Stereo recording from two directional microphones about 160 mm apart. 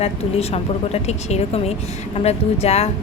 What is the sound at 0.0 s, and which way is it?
A woman's voice, 40° left (ahead or behind).